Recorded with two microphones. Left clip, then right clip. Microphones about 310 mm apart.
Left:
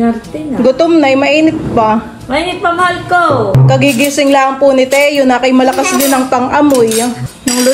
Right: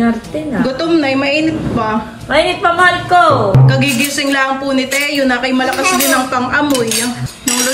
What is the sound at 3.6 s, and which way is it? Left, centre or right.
Speech, centre.